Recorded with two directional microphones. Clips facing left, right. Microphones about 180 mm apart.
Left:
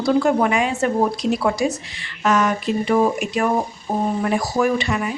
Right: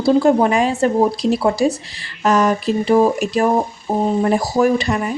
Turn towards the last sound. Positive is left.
turn(degrees=-40)  # may be behind; listen again after turning